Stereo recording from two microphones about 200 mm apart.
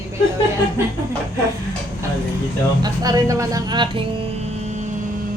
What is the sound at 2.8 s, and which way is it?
Speech, 20° right (ahead or behind).